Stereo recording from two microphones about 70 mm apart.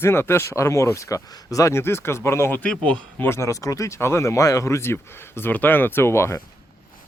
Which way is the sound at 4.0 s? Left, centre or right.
Left.